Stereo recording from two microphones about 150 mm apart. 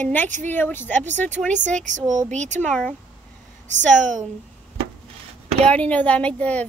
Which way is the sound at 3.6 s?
55° right (ahead or behind).